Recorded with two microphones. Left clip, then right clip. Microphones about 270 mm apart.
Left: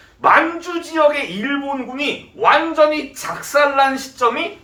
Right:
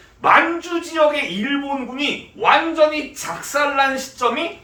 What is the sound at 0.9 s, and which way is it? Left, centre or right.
Speech, centre.